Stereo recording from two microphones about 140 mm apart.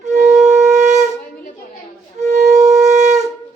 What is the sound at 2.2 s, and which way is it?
Wind instrument, 55° right (ahead or behind).